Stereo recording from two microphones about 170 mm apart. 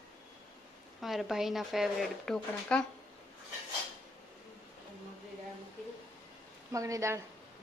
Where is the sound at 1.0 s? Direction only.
Centre (ahead or behind).